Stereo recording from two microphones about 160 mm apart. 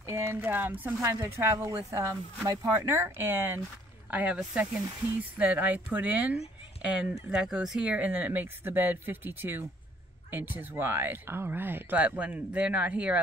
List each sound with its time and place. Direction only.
0.0 s speech: 15° right (ahead or behind)